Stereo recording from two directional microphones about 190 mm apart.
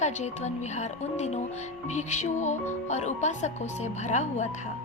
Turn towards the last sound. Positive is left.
turn(degrees=40)  # may be behind; listen again after turning